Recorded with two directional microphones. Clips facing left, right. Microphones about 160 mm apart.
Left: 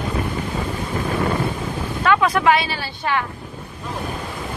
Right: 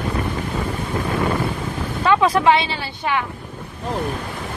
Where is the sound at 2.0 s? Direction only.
30° right (ahead or behind).